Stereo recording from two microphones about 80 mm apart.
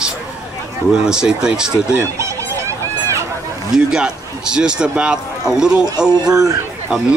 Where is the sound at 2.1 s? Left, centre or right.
Right.